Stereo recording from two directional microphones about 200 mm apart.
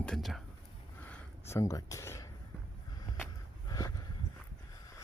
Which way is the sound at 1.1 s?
10° left (ahead or behind).